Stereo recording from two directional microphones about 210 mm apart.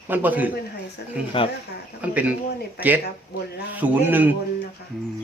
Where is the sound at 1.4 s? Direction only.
25° left (ahead or behind).